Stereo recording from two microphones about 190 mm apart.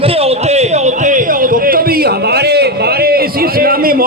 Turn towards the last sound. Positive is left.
turn(degrees=-50)  # may be behind; listen again after turning